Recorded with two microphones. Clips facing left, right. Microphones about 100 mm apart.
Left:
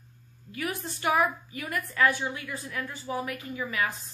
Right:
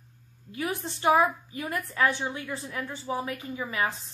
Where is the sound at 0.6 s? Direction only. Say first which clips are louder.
Right 2 dB; 25° right (ahead or behind).